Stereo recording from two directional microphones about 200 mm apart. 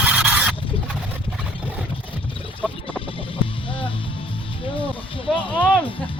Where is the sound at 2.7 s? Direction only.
25° left (ahead or behind).